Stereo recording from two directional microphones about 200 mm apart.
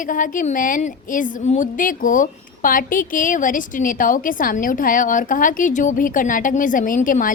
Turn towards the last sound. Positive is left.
turn(degrees=40)  # may be behind; listen again after turning